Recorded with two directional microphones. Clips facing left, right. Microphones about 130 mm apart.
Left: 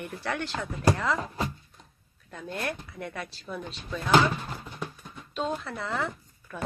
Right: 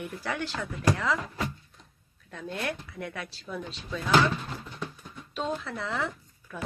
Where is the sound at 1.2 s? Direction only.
30° left (ahead or behind).